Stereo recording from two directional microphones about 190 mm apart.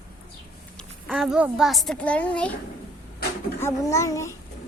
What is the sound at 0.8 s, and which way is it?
A woman's voice, centre (ahead or behind).